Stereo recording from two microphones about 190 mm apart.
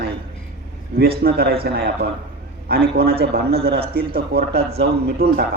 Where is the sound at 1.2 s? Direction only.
50° right (ahead or behind).